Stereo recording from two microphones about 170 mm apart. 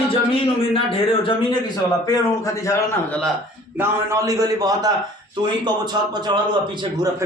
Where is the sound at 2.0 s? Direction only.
20° left (ahead or behind).